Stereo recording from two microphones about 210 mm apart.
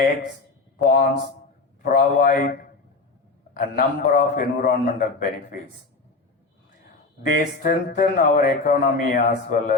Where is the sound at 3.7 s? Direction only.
45° left (ahead or behind).